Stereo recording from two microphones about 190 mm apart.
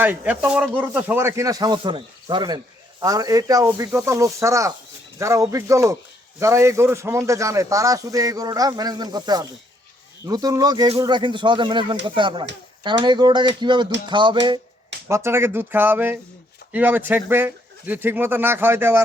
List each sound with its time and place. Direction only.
0.0 s a man's voice: 10° right (ahead or behind); by 14.3 s 25° right (ahead or behind)
15.0 s a man's voice: 15° right (ahead or behind)